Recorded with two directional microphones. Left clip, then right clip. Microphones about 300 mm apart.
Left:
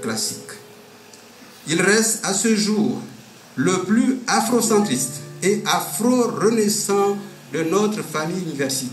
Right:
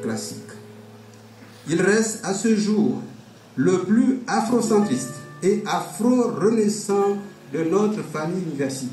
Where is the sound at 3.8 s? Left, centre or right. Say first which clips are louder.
Left 1 dB; centre.